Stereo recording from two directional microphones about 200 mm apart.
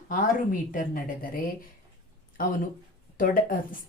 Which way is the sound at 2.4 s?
45° left (ahead or behind).